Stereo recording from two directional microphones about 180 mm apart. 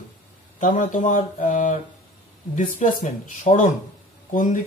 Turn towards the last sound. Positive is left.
turn(degrees=45)  # may be behind; listen again after turning